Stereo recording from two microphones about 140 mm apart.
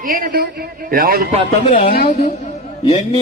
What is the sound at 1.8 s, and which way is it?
Speech, 90° left.